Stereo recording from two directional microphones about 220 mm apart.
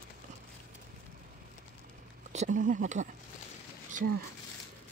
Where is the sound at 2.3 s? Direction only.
35° right (ahead or behind).